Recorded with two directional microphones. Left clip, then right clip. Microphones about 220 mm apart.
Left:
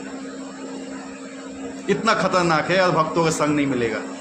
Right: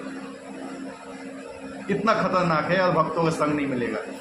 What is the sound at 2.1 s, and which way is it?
A man's voice, 55° left (ahead or behind).